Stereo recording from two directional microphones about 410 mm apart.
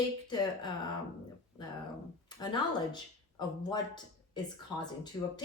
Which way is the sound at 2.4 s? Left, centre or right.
Centre.